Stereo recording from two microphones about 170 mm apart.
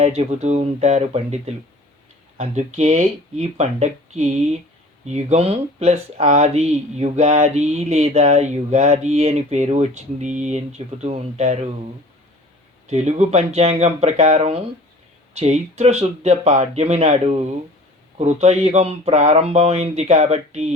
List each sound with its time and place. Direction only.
0.0 s speech: 35° right (ahead or behind)
12.9 s speech: 40° right (ahead or behind)